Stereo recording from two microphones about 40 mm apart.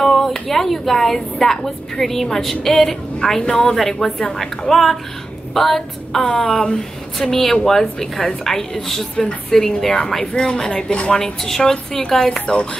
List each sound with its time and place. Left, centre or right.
0.0 s a woman's voice: centre
6.2 s a woman's voice: left
7.2 s a woman's voice: centre
11.1 s a woman's voice: centre